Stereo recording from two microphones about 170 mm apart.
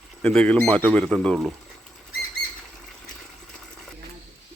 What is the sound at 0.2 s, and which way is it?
Speech, 5° left (ahead or behind).